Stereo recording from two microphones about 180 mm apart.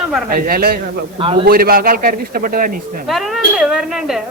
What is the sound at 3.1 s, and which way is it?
A woman's voice, centre (ahead or behind).